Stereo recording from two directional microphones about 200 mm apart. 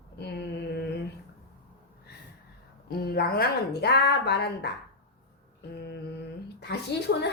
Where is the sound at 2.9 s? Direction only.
50° left (ahead or behind).